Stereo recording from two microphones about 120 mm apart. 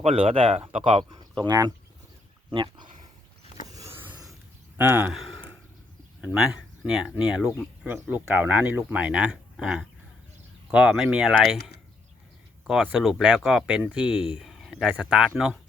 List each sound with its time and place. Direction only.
0.0 s speech: 50° right (ahead or behind); by 0.9 s 65° right (ahead or behind)
1.1 s speech: 35° right (ahead or behind)
4.8 s speech: 20° right (ahead or behind)
5.1 s speech: centre (ahead or behind)